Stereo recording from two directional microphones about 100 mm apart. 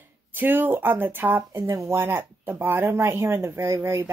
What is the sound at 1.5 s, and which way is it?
A woman's voice, 30° right (ahead or behind).